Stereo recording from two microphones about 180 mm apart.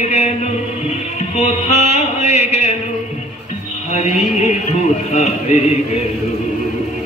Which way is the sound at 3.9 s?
35° left (ahead or behind).